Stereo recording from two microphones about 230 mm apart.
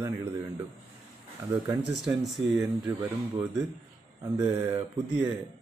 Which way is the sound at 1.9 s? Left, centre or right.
Centre.